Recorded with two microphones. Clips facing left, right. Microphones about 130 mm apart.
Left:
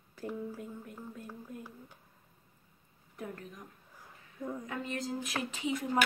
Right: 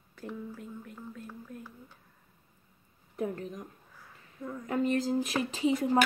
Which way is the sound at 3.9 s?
20° left (ahead or behind).